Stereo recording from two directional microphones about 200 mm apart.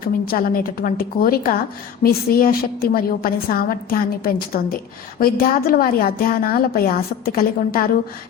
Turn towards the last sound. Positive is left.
turn(degrees=45)  # may be behind; listen again after turning